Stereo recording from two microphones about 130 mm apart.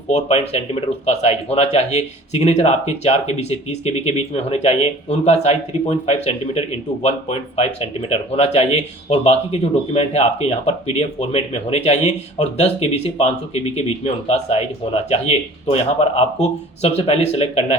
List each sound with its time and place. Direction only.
0.1 s speech: 55° left (ahead or behind)